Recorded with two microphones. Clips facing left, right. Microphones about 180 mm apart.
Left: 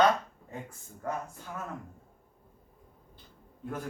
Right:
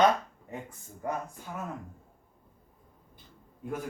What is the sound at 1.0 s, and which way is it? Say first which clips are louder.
Speech: right 1 dB; 20° right (ahead or behind).